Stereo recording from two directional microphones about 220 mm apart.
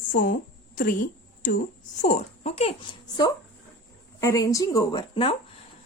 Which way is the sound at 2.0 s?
30° left (ahead or behind).